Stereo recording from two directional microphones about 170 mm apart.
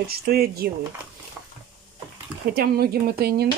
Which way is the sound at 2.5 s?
65° right (ahead or behind).